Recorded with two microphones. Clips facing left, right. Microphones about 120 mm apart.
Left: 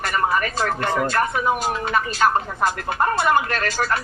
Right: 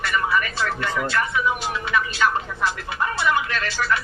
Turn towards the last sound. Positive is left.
turn(degrees=45)  # may be behind; listen again after turning